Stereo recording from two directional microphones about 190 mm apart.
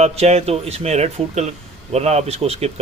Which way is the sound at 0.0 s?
35° right (ahead or behind).